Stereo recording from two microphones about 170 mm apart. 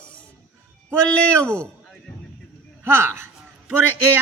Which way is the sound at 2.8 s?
15° right (ahead or behind).